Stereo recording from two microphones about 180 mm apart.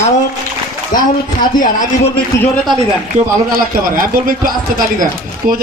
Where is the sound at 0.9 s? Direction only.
50° left (ahead or behind).